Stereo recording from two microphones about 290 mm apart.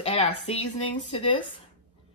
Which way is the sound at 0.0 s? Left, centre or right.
Centre.